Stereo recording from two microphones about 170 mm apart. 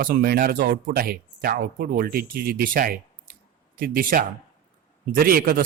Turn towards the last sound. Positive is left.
turn(degrees=-60)  # may be behind; listen again after turning